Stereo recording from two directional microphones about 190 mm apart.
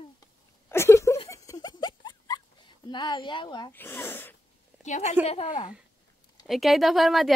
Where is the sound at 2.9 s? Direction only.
25° left (ahead or behind).